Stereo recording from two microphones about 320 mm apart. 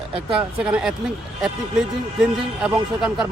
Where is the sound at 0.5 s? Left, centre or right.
Centre.